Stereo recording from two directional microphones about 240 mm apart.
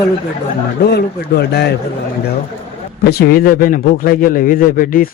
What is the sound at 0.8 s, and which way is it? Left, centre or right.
Speech, left.